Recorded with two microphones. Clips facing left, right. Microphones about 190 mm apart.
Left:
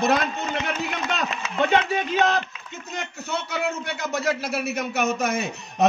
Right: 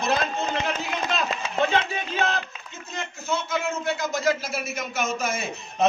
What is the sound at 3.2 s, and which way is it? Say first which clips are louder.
A man's voice: right 1 dB; 65° left (ahead or behind).